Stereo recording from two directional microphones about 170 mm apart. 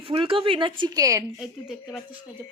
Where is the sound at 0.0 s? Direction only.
30° right (ahead or behind).